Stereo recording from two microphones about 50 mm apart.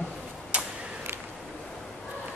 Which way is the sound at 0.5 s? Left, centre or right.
Right.